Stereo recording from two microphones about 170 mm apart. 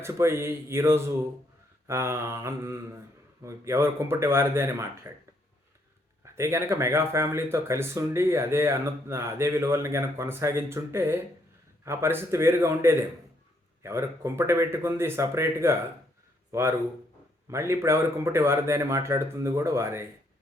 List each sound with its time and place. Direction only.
0.0 s speech: 15° right (ahead or behind)
6.2 s a man's voice: 15° right (ahead or behind)